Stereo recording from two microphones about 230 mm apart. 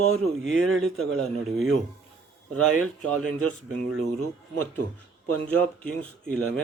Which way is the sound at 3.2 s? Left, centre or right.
Centre.